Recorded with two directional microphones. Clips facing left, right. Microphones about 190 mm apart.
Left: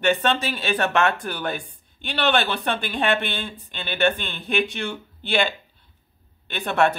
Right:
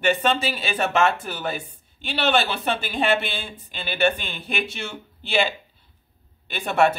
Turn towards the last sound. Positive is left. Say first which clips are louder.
# right 1 dB
turn(degrees=-10)  # may be behind; listen again after turning